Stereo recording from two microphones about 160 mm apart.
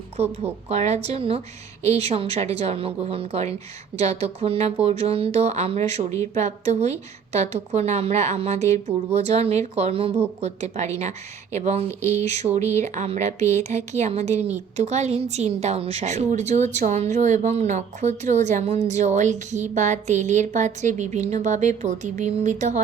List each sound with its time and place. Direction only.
0.2 s a woman's voice: 40° right (ahead or behind)